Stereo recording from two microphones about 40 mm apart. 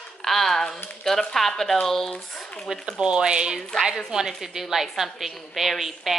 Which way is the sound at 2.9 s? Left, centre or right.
Right.